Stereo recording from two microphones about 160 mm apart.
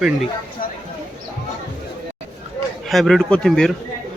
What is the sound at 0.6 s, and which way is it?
Clip-clop, 60° left (ahead or behind).